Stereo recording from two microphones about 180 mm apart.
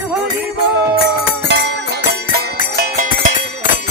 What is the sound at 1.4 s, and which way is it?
Music, 75° right (ahead or behind).